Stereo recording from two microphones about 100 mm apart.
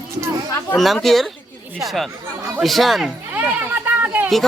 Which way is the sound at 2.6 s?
Centre (ahead or behind).